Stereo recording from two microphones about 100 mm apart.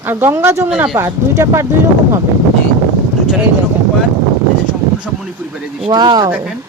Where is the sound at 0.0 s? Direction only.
20° right (ahead or behind).